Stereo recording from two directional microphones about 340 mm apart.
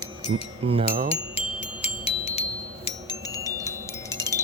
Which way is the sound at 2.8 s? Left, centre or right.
Centre.